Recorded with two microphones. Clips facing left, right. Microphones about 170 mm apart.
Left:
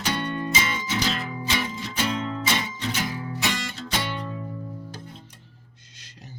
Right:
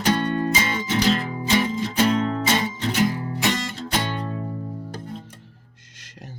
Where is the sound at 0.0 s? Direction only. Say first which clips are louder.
Right 6 dB; 40° right (ahead or behind).